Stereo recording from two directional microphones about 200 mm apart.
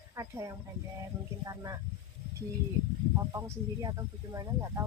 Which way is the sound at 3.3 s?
15° right (ahead or behind).